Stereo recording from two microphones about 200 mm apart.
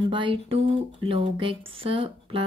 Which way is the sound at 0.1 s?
25° right (ahead or behind).